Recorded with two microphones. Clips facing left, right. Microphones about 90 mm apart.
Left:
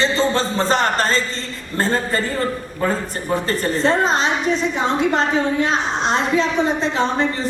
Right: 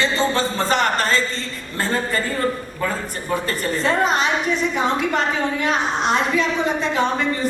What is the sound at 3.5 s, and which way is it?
A woman's voice, 30° left (ahead or behind).